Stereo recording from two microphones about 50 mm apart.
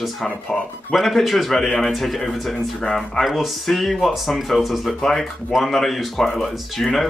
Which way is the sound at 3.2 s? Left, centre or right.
Centre.